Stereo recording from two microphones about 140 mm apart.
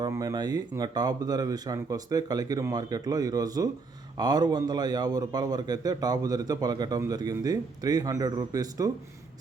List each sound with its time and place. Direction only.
0.0 s speech: 25° right (ahead or behind)